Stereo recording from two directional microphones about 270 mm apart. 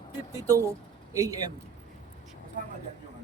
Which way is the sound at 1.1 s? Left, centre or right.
Centre.